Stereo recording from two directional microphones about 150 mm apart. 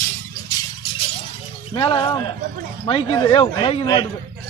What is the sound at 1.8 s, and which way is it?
Speech, 30° left (ahead or behind).